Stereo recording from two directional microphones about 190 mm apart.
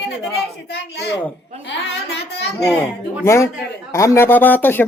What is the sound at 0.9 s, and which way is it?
Speech, 65° left (ahead or behind).